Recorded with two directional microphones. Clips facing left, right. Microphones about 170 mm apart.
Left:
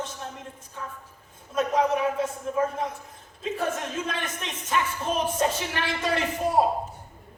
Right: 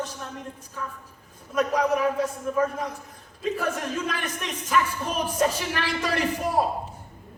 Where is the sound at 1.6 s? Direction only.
25° left (ahead or behind).